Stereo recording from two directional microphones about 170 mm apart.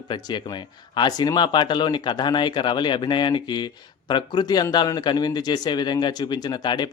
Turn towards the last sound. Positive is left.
turn(degrees=25)  # may be behind; listen again after turning